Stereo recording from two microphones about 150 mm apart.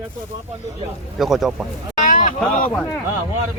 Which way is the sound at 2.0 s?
60° left (ahead or behind).